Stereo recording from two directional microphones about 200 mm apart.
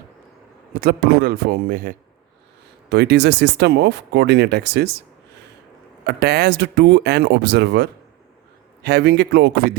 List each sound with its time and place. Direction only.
0.8 s a man's voice: 50° right (ahead or behind)
2.9 s speech: 60° right (ahead or behind)
6.1 s speech: 55° right (ahead or behind)